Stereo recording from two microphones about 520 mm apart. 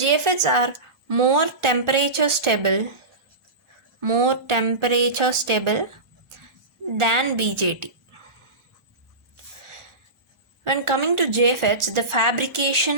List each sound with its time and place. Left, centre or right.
0.0 s a woman's voice: right
4.0 s a woman's voice: right
6.9 s a woman's voice: right
10.6 s a woman's voice: right